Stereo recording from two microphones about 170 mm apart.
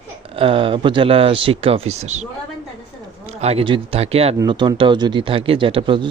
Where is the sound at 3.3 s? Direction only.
35° right (ahead or behind).